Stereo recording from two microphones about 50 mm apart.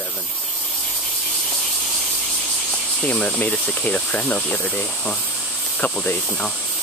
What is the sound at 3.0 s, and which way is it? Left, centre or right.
Speech, left.